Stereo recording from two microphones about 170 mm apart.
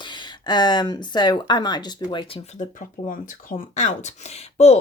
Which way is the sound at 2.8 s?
50° left (ahead or behind).